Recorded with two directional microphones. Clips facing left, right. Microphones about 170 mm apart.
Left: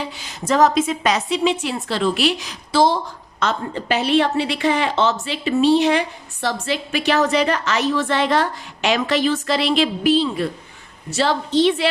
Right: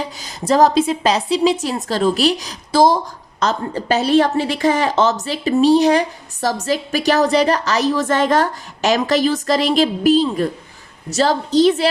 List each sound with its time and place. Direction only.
0.0 s a woman's voice: 40° right (ahead or behind)